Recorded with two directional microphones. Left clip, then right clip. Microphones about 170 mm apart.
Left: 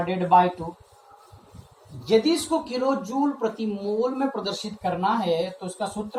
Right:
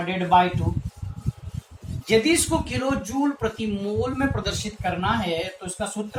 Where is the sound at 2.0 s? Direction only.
15° right (ahead or behind).